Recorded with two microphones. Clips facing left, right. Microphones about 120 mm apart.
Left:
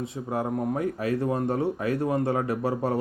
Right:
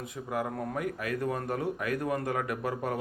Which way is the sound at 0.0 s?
30° left (ahead or behind).